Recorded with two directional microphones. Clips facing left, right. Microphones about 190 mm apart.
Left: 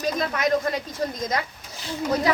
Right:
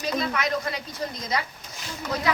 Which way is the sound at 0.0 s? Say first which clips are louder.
Left 2 dB; 45° left (ahead or behind).